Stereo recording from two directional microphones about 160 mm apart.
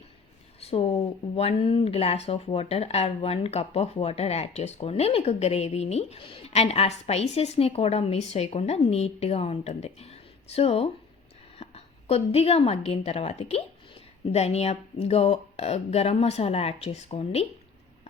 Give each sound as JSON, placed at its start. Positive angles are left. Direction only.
{"t": 0.6, "sound": "a woman's voice", "side_deg": 40}